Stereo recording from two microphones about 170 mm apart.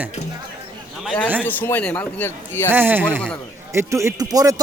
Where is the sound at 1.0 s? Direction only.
5° left (ahead or behind).